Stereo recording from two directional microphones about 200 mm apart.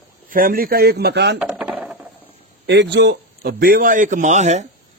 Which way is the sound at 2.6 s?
60° right (ahead or behind).